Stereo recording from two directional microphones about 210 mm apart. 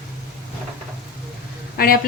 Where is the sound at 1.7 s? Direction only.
45° left (ahead or behind).